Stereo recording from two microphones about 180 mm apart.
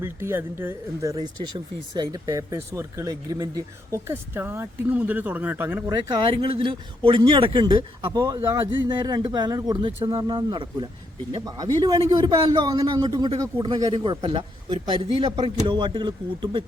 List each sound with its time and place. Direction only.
0.0 s speech: 15° right (ahead or behind)
1.1 s speech: 25° right (ahead or behind)
6.1 s a man's voice: 25° right (ahead or behind)